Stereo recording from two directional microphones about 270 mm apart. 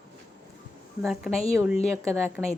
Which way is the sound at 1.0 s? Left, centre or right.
Centre.